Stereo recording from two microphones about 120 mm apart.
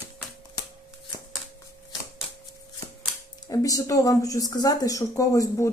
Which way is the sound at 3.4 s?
30° left (ahead or behind).